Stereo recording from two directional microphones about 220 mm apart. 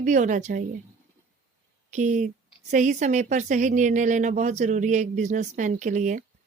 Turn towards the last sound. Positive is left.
turn(degrees=-35)  # may be behind; listen again after turning